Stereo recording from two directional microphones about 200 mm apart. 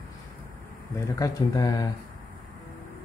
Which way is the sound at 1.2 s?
15° left (ahead or behind).